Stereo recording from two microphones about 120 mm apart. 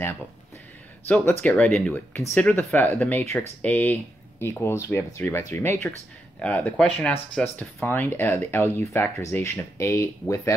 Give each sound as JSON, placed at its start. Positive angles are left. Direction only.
{"t": 1.0, "sound": "speech", "side_deg": 15}